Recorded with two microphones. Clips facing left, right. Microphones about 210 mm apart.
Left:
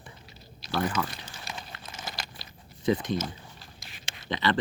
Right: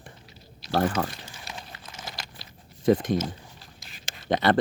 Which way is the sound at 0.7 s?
45° right (ahead or behind).